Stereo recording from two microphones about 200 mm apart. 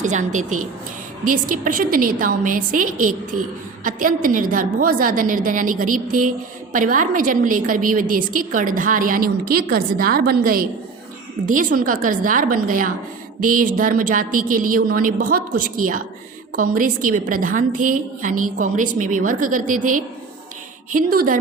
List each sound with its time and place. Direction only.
0.0 s a woman's voice: 35° right (ahead or behind)